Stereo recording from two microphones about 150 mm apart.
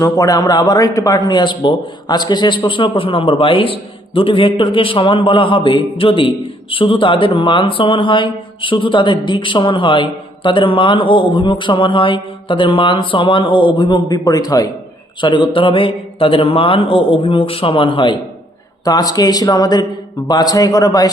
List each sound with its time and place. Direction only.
0.0 s a man's voice: 25° left (ahead or behind)